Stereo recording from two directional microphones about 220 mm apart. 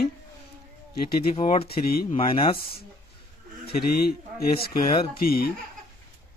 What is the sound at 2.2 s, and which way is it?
Speech, 25° left (ahead or behind).